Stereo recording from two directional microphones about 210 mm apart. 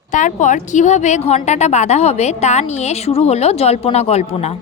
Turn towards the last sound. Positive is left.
turn(degrees=30)  # may be behind; listen again after turning